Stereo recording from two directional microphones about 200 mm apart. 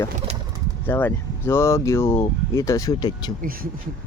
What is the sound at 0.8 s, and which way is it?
Speech, 10° left (ahead or behind).